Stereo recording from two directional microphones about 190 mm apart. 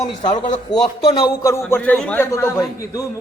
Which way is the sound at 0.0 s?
25° left (ahead or behind).